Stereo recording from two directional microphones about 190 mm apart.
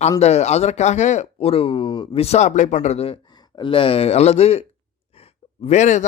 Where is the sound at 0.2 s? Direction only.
35° left (ahead or behind).